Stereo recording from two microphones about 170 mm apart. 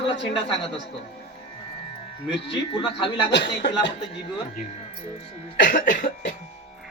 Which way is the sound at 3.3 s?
90° left.